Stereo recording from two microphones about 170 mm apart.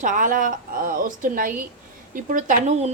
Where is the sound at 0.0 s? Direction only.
50° right (ahead or behind).